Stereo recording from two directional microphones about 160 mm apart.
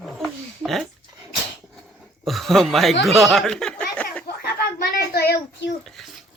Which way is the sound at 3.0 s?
Centre (ahead or behind).